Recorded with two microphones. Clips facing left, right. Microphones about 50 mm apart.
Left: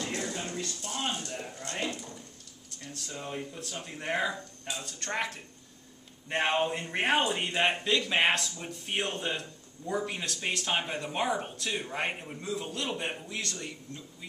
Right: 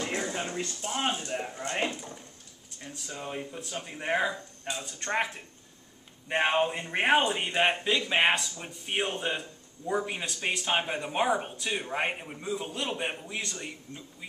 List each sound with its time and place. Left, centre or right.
0.0 s speech: right